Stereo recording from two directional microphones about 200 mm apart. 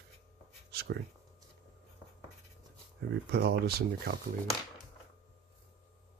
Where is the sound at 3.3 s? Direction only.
55° right (ahead or behind).